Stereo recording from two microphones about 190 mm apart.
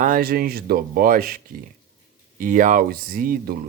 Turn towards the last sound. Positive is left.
turn(degrees=-50)  # may be behind; listen again after turning